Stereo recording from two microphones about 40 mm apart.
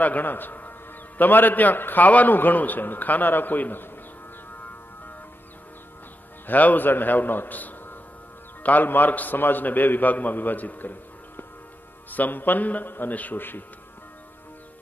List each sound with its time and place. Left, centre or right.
0.0 s a man's voice: left
6.4 s a man's voice: left